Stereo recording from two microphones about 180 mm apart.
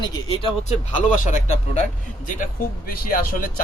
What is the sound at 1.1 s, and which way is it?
Speech, 45° left (ahead or behind).